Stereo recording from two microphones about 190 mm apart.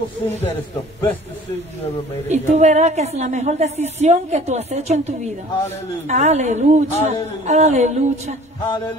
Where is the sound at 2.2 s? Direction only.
35° right (ahead or behind).